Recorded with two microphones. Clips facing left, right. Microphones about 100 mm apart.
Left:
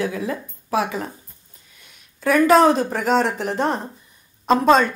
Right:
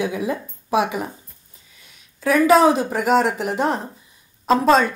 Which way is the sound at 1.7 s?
Centre (ahead or behind).